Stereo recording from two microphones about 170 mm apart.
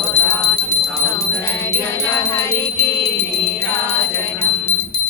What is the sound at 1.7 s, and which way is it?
Music, 15° left (ahead or behind).